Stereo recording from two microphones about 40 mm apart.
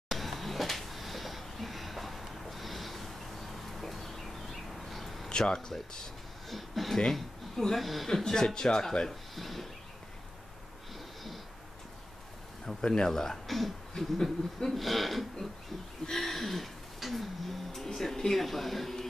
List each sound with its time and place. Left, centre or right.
0.1 s a sound: centre
5.4 s speech: centre
6.5 s speech: centre
8.1 s speech: centre
9.3 s speech: centre
12.6 s speech: left
13.5 s speech: centre
14.7 s music: centre